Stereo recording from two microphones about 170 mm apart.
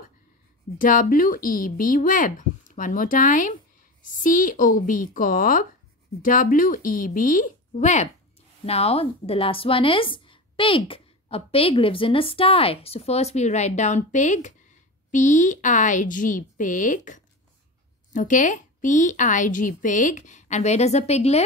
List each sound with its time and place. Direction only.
0.7 s a woman's voice: 50° left (ahead or behind)